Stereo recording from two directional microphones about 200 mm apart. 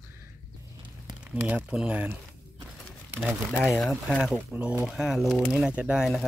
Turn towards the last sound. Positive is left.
turn(degrees=0)  # may be behind; listen again after turning